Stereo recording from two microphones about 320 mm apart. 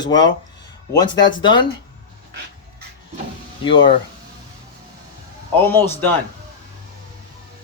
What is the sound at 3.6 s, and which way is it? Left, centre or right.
Speech, centre.